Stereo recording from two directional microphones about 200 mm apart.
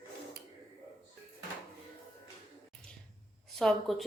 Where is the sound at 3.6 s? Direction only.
Centre (ahead or behind).